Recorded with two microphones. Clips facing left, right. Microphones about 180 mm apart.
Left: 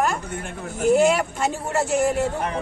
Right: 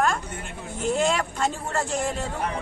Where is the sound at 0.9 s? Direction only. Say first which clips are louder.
Left 6 dB; 5° left (ahead or behind).